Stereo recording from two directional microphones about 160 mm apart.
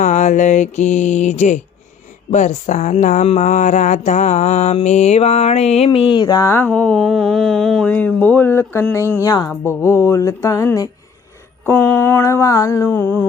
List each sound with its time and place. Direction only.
0.0 s mantra: 50° left (ahead or behind)
2.3 s speech: 50° left (ahead or behind); by 9.5 s 25° left (ahead or behind)
9.5 s mantra: 15° left (ahead or behind)